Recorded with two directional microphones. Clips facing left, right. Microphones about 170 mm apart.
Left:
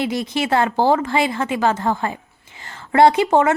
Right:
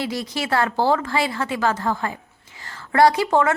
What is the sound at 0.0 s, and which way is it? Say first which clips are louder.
Speech: left 5 dB; 20° left (ahead or behind).